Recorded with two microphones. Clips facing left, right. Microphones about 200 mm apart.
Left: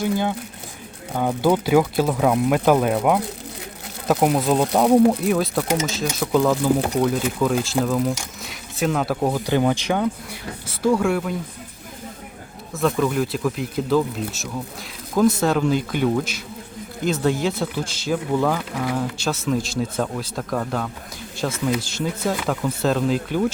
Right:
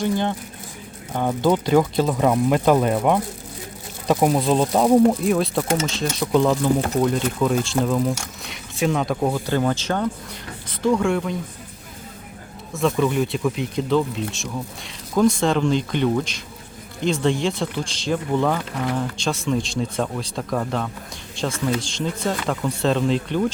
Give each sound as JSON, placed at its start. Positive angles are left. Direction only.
{"t": 0.0, "sound": "speech", "side_deg": 5}
{"t": 12.7, "sound": "speech", "side_deg": 0}